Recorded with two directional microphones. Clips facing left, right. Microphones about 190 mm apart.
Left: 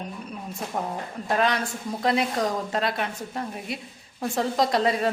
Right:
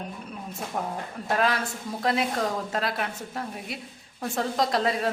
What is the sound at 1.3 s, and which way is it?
Speech, centre (ahead or behind).